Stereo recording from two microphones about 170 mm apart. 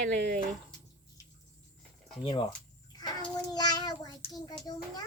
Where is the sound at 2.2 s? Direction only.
30° left (ahead or behind).